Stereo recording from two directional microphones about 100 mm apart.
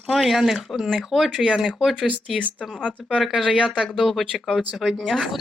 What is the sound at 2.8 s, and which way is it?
Speech, 10° left (ahead or behind).